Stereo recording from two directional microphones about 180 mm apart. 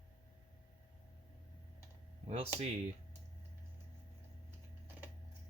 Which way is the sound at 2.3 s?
35° right (ahead or behind).